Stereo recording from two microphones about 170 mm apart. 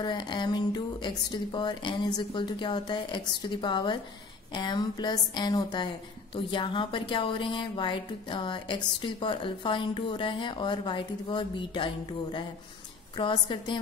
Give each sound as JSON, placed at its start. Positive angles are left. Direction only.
{"t": 0.0, "sound": "a woman's voice", "side_deg": 25}